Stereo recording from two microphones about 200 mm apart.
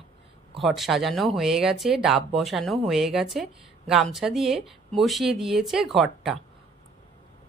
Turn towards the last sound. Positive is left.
turn(degrees=0)  # may be behind; listen again after turning